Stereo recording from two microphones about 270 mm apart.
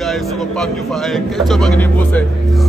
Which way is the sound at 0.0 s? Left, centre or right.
Centre.